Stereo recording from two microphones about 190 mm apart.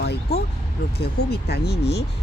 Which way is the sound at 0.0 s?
60° left (ahead or behind).